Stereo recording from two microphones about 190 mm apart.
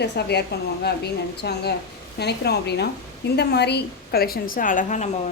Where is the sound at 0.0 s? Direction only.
60° left (ahead or behind).